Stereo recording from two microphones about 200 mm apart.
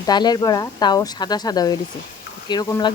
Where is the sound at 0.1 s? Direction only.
20° left (ahead or behind).